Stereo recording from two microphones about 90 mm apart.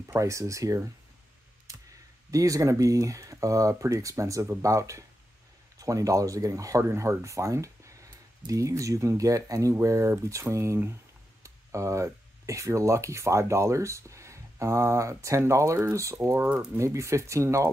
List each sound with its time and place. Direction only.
0.1 s speech: 35° right (ahead or behind)